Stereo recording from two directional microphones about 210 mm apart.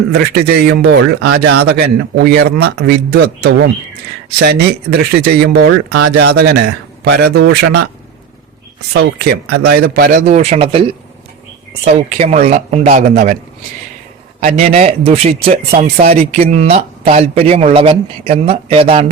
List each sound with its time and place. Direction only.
0.1 s speech: 50° right (ahead or behind)
8.9 s speech: 50° right (ahead or behind); by 13.3 s 35° right (ahead or behind)
14.4 s speech: 30° right (ahead or behind)